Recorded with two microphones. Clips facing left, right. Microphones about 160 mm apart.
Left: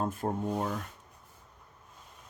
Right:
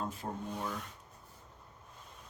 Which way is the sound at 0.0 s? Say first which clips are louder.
Left 7 dB; 50° left (ahead or behind).